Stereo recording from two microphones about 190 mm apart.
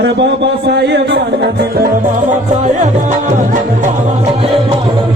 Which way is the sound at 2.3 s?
40° right (ahead or behind).